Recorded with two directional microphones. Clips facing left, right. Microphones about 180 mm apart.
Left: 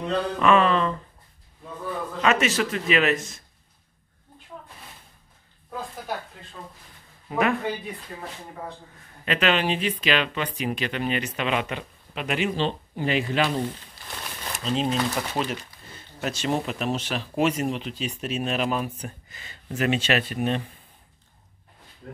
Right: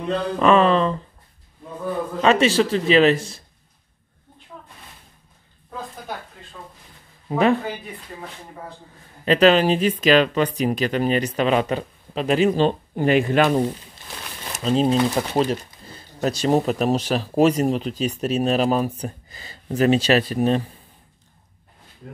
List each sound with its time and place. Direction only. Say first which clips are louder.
0.4 s speech: right 4 dB; 35° right (ahead or behind)
2.2 s speech: right 6 dB; 30° right (ahead or behind)
7.2 s speech: right 5 dB; 30° right (ahead or behind)
9.2 s speech: right 8 dB; 35° right (ahead or behind); by 13.6 s 50° right (ahead or behind)
14.6 s speech: right 7 dB; 40° right (ahead or behind)